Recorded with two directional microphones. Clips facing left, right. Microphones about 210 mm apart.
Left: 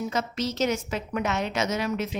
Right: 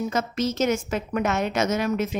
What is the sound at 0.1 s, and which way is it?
A woman's voice, 50° right (ahead or behind).